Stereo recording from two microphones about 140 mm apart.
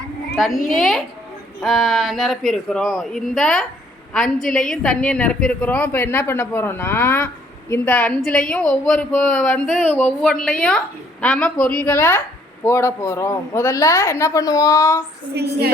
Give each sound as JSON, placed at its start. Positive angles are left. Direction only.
{"t": 0.3, "sound": "a woman's voice", "side_deg": 0}